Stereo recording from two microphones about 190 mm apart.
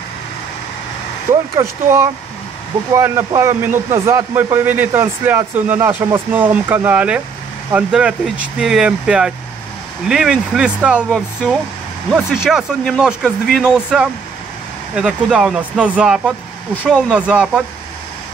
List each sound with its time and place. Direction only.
1.3 s speech: 15° right (ahead or behind)